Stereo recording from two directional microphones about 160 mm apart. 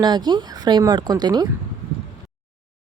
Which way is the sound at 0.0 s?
25° right (ahead or behind).